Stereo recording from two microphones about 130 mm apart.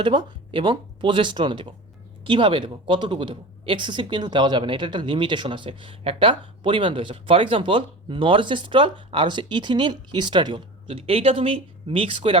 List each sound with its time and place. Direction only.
0.0 s a woman's voice: 35° right (ahead or behind)